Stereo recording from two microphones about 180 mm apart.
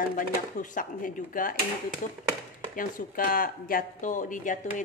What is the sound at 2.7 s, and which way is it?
Speech, 50° left (ahead or behind).